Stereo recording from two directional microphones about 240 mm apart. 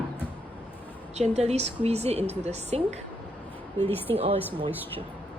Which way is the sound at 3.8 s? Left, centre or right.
Centre.